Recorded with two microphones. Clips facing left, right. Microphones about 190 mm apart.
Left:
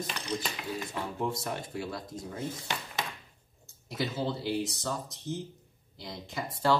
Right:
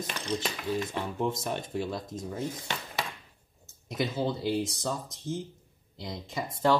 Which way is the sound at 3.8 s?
20° right (ahead or behind).